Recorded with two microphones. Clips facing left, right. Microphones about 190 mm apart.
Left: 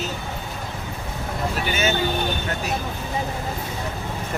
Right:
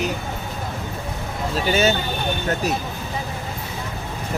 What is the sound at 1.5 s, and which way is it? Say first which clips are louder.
Speech: right 7 dB; 35° right (ahead or behind).